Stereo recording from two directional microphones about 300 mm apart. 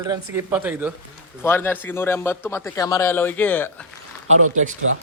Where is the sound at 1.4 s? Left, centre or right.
Centre.